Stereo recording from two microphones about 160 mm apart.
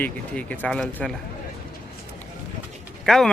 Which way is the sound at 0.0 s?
10° left (ahead or behind).